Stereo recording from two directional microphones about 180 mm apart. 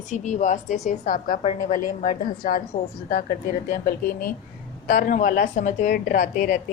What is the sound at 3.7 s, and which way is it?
A woman's voice, 55° left (ahead or behind).